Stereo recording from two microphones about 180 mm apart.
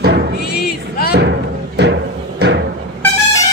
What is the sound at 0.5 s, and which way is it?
Music, 60° left (ahead or behind).